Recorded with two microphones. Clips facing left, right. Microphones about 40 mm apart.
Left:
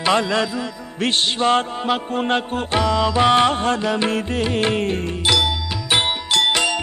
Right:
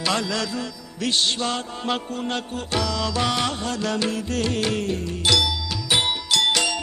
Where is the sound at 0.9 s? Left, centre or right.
Left.